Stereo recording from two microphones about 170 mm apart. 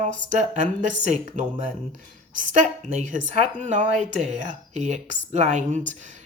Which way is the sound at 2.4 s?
50° right (ahead or behind).